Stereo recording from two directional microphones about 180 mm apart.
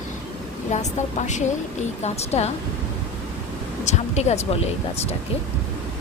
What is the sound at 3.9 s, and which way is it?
Speech, 40° left (ahead or behind).